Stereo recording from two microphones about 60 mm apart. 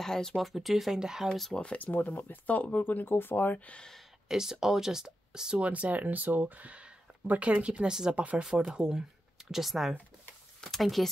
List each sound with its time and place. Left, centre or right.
0.0 s speech: centre
1.6 s speech: left
2.0 s speech: left
4.3 s speech: centre